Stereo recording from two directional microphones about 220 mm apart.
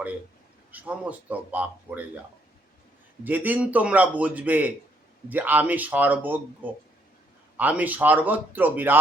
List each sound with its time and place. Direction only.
0.7 s a man's voice: 5° right (ahead or behind)
3.2 s a man's voice: 5° right (ahead or behind)